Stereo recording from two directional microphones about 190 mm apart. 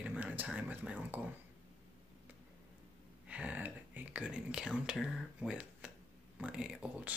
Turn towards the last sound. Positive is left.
turn(degrees=-5)  # may be behind; listen again after turning